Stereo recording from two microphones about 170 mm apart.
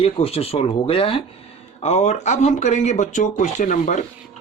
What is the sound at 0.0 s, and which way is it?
Speech, 35° left (ahead or behind).